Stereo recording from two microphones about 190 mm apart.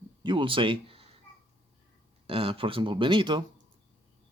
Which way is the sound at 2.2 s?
30° right (ahead or behind).